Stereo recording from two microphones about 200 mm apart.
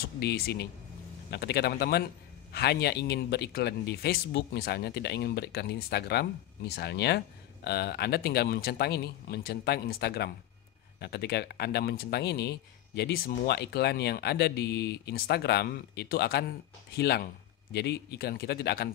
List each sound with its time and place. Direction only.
0.0 s speech: 50° left (ahead or behind)